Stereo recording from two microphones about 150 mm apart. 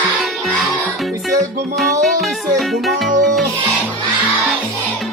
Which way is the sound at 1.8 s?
Centre (ahead or behind).